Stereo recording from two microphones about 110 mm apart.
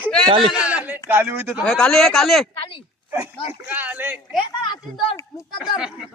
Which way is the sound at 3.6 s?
15° right (ahead or behind).